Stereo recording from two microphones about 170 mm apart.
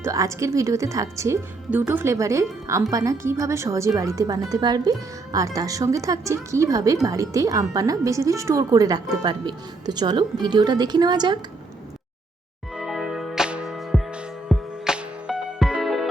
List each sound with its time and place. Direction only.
0.0 s a woman's voice: 20° right (ahead or behind)
12.7 s music: centre (ahead or behind)